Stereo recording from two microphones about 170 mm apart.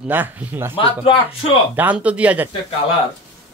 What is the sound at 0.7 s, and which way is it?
Speech, 30° left (ahead or behind).